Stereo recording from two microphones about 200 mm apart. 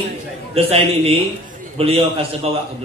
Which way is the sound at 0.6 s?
30° right (ahead or behind).